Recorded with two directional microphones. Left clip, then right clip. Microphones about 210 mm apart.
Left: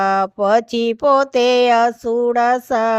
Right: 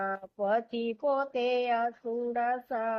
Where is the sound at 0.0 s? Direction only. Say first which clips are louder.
Left 16 dB; 50° left (ahead or behind).